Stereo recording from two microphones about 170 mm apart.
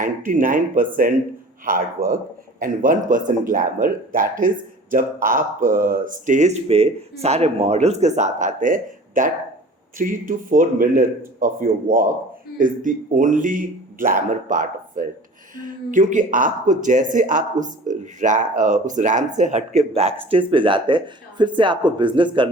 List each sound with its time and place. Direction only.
0.0 s speech: 50° right (ahead or behind); by 22.4 s 30° right (ahead or behind)